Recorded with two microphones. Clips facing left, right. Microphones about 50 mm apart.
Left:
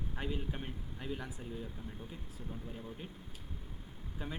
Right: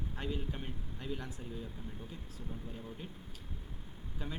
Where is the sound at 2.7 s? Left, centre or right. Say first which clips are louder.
Even; centre.